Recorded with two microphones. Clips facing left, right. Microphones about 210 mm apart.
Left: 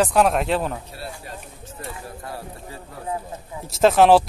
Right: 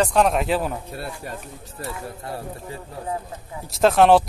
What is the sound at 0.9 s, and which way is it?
Speech, 55° right (ahead or behind).